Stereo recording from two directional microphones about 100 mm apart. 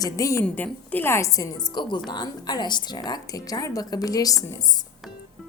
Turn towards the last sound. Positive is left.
turn(degrees=40)  # may be behind; listen again after turning